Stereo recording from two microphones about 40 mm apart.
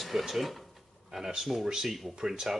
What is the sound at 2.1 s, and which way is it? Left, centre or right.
Speech, centre.